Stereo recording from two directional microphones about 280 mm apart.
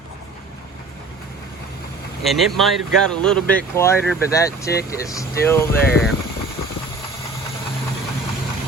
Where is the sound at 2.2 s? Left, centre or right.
Centre.